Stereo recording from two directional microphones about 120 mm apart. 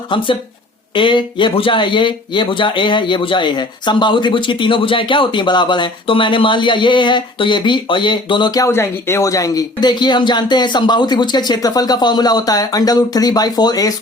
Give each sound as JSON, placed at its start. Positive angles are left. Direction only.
{"t": 0.1, "sound": "speech", "side_deg": 40}